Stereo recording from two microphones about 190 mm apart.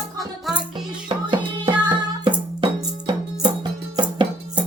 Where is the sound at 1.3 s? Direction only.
25° right (ahead or behind).